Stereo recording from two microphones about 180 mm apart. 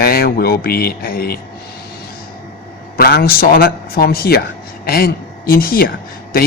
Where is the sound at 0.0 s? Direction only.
60° left (ahead or behind).